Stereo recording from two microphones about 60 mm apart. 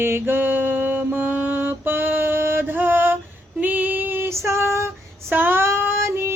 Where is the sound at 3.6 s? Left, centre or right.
Right.